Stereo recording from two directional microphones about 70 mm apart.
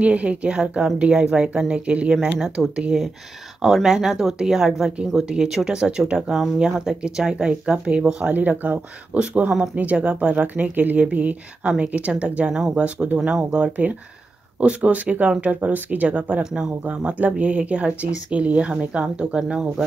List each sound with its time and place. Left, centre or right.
0.0 s speech: centre
2.1 s speech: centre